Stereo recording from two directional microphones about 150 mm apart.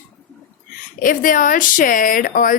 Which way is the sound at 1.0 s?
65° left (ahead or behind).